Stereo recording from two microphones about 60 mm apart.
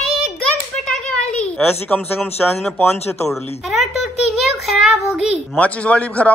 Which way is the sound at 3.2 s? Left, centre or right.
Centre.